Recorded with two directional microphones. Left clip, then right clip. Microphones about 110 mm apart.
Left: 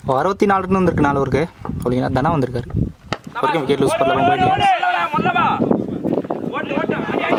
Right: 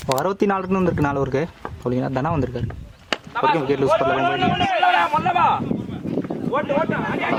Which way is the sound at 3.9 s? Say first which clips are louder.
Left 4 dB; 35° left (ahead or behind).